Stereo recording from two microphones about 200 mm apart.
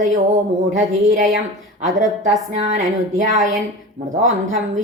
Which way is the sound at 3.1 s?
40° right (ahead or behind).